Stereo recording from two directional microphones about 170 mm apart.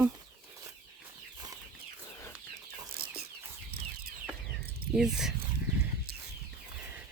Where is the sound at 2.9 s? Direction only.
65° right (ahead or behind).